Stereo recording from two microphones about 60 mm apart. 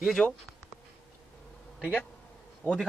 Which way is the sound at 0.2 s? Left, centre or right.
Left.